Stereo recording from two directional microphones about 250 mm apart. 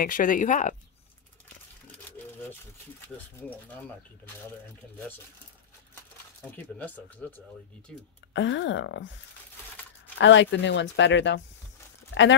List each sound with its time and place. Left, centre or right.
0.0 s speech: left
3.3 s speech: centre
6.4 s speech: centre
8.3 s speech: left
10.1 s speech: left